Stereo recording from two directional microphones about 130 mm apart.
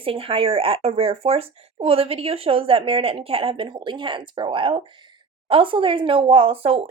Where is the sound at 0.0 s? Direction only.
45° right (ahead or behind).